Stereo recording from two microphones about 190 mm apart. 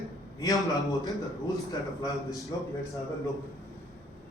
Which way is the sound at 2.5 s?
20° left (ahead or behind).